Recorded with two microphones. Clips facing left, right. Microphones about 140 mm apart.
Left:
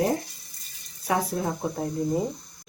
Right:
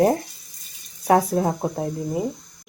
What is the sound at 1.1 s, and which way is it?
Speech, 45° right (ahead or behind).